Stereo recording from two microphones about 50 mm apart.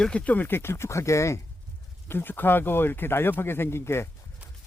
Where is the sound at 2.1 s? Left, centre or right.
Left.